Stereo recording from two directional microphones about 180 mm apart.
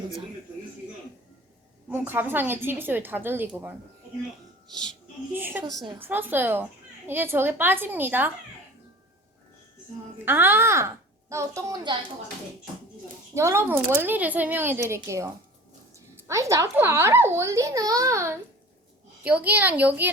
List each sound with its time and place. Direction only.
1.9 s a child's voice: 10° right (ahead or behind)
5.3 s a child's voice: 10° right (ahead or behind)
10.2 s a child's voice: 10° right (ahead or behind)
13.3 s a child's voice: 15° right (ahead or behind)